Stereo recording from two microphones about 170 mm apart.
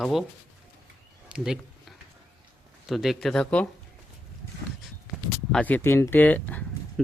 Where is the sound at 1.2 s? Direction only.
5° right (ahead or behind).